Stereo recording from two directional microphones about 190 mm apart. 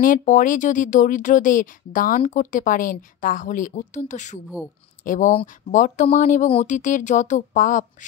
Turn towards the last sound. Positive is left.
turn(degrees=45)  # may be behind; listen again after turning